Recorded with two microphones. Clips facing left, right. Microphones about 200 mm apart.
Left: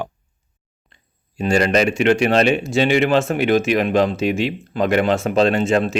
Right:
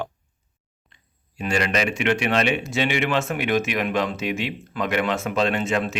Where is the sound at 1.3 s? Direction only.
35° left (ahead or behind).